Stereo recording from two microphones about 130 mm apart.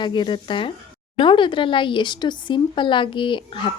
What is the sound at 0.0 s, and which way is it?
Speech, 35° left (ahead or behind).